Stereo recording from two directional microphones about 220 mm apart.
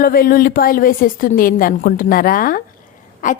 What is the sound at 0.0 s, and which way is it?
A woman's voice, 40° left (ahead or behind).